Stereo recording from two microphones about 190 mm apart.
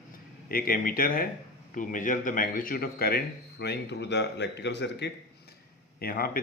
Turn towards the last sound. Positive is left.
turn(degrees=50)  # may be behind; listen again after turning